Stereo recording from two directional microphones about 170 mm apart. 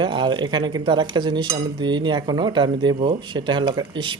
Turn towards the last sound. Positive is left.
turn(degrees=-30)  # may be behind; listen again after turning